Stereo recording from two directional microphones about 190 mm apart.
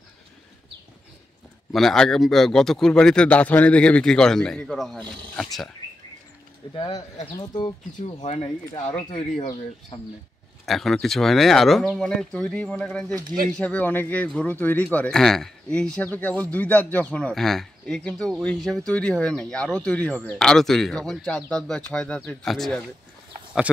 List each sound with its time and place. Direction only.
1.7 s a man's voice: centre (ahead or behind)
6.7 s speech: 25° left (ahead or behind)
8.0 s speech: 35° left (ahead or behind)
10.6 s a man's voice: centre (ahead or behind)